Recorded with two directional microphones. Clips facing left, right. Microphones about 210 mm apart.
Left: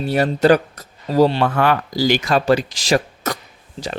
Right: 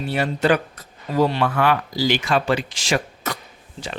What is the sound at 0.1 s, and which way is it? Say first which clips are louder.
Speech: left 5 dB; 40° left (ahead or behind).